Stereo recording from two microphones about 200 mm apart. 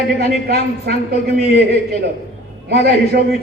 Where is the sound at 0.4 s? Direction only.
50° right (ahead or behind).